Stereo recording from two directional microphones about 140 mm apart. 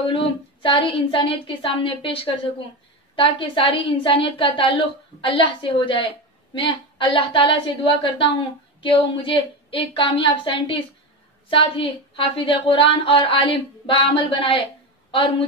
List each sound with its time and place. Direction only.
0.0 s a woman's voice: 35° left (ahead or behind)